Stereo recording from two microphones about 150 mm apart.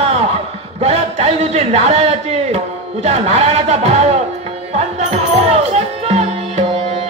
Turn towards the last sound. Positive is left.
turn(degrees=-45)  # may be behind; listen again after turning